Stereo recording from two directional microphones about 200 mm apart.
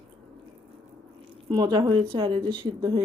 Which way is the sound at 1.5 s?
20° right (ahead or behind).